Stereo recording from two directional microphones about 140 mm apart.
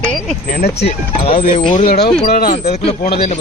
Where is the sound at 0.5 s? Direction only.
50° left (ahead or behind).